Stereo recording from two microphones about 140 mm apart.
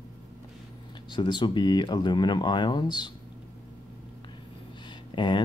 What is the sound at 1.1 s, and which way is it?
Speech, 35° left (ahead or behind).